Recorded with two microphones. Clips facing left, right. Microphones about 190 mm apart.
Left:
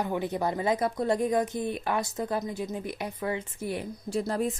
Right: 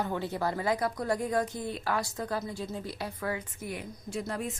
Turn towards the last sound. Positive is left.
turn(degrees=35)  # may be behind; listen again after turning